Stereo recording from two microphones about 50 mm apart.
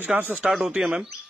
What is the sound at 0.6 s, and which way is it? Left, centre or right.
Speech, centre.